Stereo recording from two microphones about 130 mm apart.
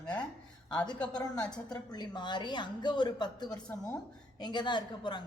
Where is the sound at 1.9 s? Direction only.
35° left (ahead or behind).